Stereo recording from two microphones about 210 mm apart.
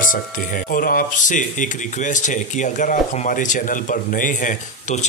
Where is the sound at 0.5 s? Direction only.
40° left (ahead or behind).